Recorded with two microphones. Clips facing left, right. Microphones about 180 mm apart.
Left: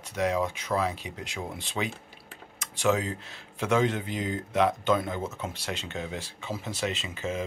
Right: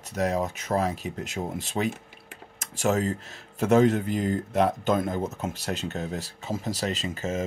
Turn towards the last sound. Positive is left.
turn(degrees=-40)  # may be behind; listen again after turning